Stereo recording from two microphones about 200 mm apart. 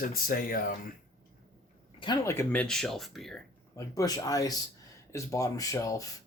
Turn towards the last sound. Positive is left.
turn(degrees=15)  # may be behind; listen again after turning